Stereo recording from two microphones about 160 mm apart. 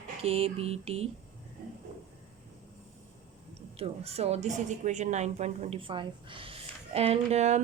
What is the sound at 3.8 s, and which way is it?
A woman's voice, 40° right (ahead or behind).